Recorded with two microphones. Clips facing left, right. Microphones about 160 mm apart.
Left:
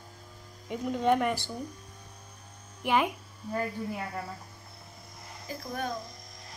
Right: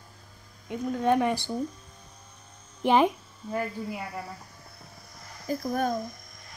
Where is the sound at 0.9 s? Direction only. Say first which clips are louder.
Right 1 dB; 15° left (ahead or behind).